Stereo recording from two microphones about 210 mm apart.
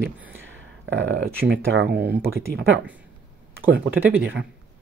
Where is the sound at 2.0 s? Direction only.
45° right (ahead or behind).